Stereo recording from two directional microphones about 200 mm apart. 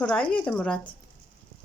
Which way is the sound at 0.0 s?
5° left (ahead or behind).